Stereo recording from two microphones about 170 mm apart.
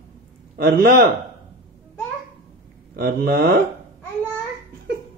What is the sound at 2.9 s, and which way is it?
Speech, 60° right (ahead or behind).